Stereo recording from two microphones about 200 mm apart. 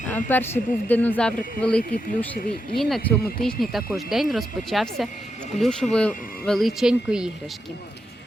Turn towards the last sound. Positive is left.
turn(degrees=-5)  # may be behind; listen again after turning